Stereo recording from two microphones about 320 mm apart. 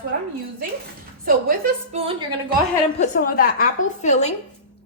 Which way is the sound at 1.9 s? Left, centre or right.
Centre.